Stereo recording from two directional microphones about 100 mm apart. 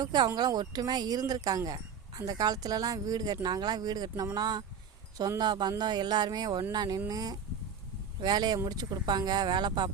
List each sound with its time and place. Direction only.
0.0 s speech: 45° right (ahead or behind)